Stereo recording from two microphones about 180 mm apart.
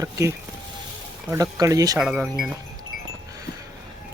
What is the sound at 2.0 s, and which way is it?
Speech, 5° right (ahead or behind).